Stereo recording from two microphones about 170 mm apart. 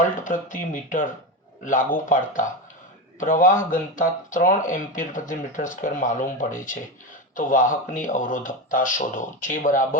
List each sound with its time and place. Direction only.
0.3 s speech: 50° left (ahead or behind)